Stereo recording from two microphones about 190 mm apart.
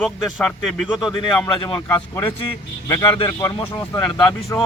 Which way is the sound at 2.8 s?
25° left (ahead or behind).